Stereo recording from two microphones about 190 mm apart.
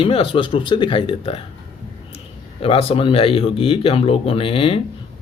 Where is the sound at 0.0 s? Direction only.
30° left (ahead or behind).